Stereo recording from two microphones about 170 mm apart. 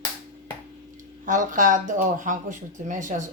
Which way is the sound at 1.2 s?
50° right (ahead or behind).